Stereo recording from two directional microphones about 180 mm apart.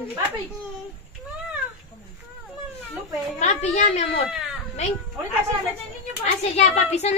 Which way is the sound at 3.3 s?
40° left (ahead or behind).